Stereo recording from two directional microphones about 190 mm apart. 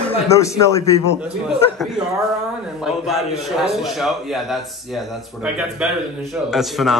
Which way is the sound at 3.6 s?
Centre (ahead or behind).